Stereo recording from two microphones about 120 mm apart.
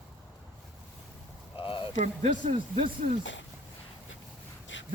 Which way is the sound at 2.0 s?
85° right.